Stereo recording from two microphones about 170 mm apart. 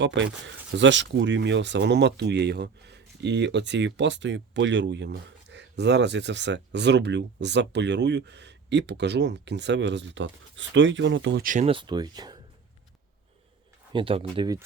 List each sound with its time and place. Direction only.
0.0 s speech: 90° right
11.4 s speech: 45° right (ahead or behind)
11.7 s speech: 25° right (ahead or behind)
13.9 s speech: 30° right (ahead or behind)